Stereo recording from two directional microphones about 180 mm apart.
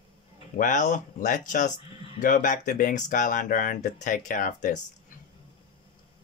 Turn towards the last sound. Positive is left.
turn(degrees=45)  # may be behind; listen again after turning